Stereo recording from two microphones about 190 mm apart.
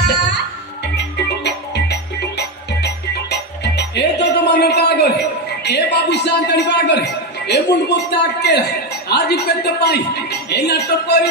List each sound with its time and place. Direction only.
0.0 s music: 60° left (ahead or behind)